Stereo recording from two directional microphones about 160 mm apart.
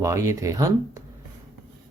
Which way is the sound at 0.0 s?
20° right (ahead or behind).